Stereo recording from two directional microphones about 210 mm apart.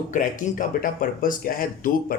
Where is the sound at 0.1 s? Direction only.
35° left (ahead or behind).